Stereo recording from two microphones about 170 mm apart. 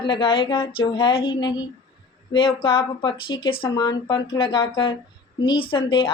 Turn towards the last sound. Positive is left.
turn(degrees=30)  # may be behind; listen again after turning